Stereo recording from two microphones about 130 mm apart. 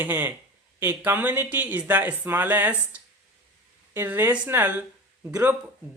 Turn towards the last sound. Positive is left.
turn(degrees=-20)  # may be behind; listen again after turning